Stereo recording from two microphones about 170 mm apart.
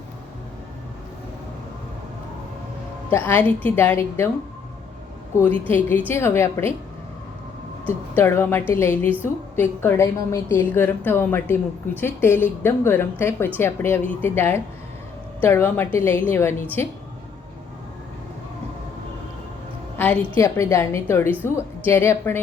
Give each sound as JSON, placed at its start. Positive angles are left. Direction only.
{"t": 3.1, "sound": "a woman's voice", "side_deg": 15}
{"t": 5.4, "sound": "a woman's voice", "side_deg": 10}
{"t": 7.9, "sound": "a woman's voice", "side_deg": 10}
{"t": 20.0, "sound": "a woman's voice", "side_deg": 10}